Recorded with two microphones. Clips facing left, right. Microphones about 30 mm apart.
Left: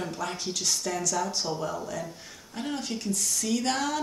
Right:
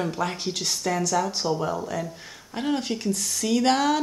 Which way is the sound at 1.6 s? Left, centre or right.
Right.